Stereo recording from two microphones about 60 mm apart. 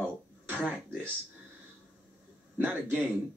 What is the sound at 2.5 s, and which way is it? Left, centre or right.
Speech, right.